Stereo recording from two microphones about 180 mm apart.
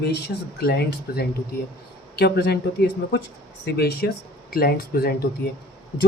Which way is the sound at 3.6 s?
60° left (ahead or behind).